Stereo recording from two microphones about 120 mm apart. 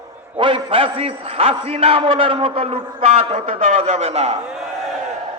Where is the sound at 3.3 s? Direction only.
85° right; by 4.4 s 60° right (ahead or behind).